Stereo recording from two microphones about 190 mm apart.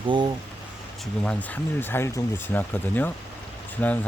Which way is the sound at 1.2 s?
5° left (ahead or behind).